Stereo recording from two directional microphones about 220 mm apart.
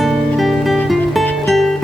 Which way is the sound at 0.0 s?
Centre (ahead or behind).